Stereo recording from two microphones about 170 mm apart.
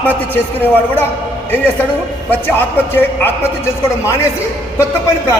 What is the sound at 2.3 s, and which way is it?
A man's voice, 10° left (ahead or behind).